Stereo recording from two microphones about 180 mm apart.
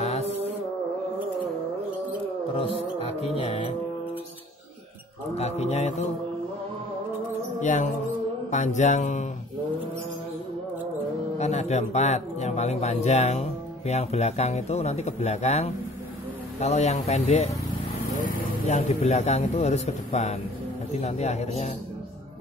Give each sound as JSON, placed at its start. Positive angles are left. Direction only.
{"t": 2.5, "sound": "a man's voice", "side_deg": 30}
{"t": 5.3, "sound": "a man's voice", "side_deg": 35}
{"t": 7.6, "sound": "a man's voice", "side_deg": 40}
{"t": 11.3, "sound": "a man's voice", "side_deg": 40}